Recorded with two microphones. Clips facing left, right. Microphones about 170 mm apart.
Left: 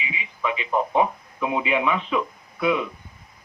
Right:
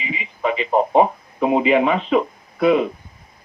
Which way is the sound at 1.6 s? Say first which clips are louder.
Right 7 dB; 90° right.